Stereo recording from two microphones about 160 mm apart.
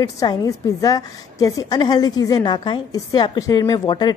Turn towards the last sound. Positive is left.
turn(degrees=25)  # may be behind; listen again after turning